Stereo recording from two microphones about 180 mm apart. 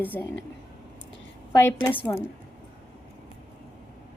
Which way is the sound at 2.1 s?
20° left (ahead or behind).